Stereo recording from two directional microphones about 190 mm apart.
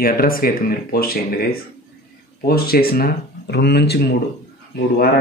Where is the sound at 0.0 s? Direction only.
50° left (ahead or behind).